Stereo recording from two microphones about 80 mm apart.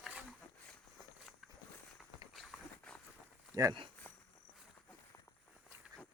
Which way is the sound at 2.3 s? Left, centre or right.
Centre.